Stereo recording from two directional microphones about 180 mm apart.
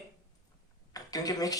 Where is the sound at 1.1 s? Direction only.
20° left (ahead or behind).